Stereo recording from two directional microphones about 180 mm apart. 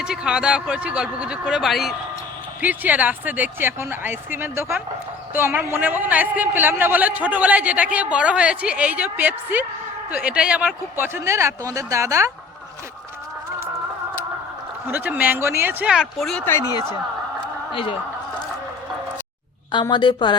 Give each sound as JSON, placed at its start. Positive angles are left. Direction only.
{"t": 0.0, "sound": "a man's voice", "side_deg": -5}
{"t": 14.8, "sound": "a man's voice", "side_deg": -10}
{"t": 17.7, "sound": "a woman's voice", "side_deg": 30}
{"t": 19.8, "sound": "a woman's voice", "side_deg": 25}